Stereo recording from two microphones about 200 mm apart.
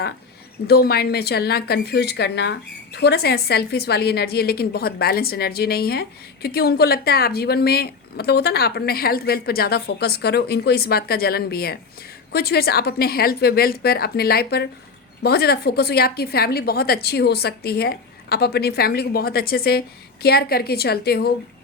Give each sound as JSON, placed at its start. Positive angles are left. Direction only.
{"t": 0.7, "sound": "a woman's voice", "side_deg": 50}